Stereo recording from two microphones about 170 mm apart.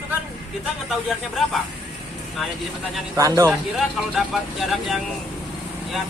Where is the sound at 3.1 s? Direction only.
20° right (ahead or behind).